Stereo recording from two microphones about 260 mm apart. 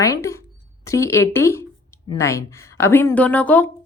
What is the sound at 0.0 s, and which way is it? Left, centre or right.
Speech, centre.